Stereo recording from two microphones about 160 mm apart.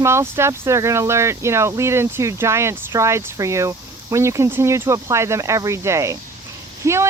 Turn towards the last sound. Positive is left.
turn(degrees=-15)  # may be behind; listen again after turning